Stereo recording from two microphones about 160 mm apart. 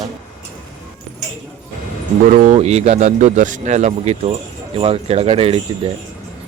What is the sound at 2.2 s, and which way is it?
Speech, 55° right (ahead or behind).